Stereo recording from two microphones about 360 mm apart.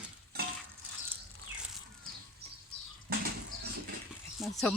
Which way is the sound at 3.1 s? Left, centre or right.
Right.